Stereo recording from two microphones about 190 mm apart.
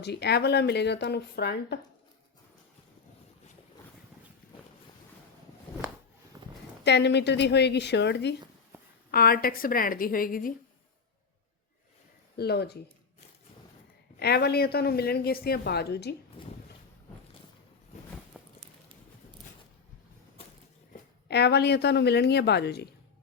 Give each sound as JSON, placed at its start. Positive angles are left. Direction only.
{"t": 0.0, "sound": "a woman's voice", "side_deg": 60}
{"t": 6.4, "sound": "a sound", "side_deg": -20}
{"t": 6.8, "sound": "a woman's voice", "side_deg": 65}
{"t": 8.7, "sound": "a sound", "side_deg": -10}
{"t": 9.1, "sound": "a woman's voice", "side_deg": 50}
{"t": 12.4, "sound": "a woman's voice", "side_deg": 60}
{"t": 14.2, "sound": "a woman's voice", "side_deg": 60}
{"t": 18.3, "sound": "walk", "side_deg": -5}
{"t": 21.2, "sound": "a woman's voice", "side_deg": 60}